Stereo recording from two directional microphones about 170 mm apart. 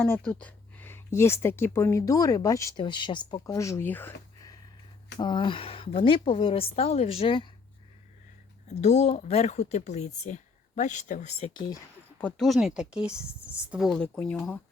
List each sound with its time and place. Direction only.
0.0 s speech: 10° left (ahead or behind); by 7.5 s 30° left (ahead or behind)
8.6 s speech: 40° left (ahead or behind)
12.2 s speech: centre (ahead or behind)